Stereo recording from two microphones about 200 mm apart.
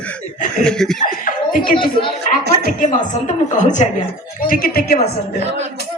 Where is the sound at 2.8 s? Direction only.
40° left (ahead or behind).